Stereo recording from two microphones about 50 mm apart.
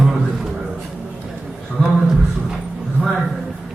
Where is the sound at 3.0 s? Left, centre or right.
Right.